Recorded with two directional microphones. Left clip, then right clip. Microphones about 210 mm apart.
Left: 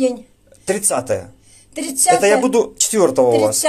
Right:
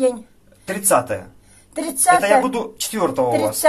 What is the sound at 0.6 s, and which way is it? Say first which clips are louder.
Speech: right 2 dB; 50° left (ahead or behind).